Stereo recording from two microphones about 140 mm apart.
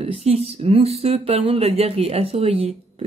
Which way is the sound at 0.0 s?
45° right (ahead or behind).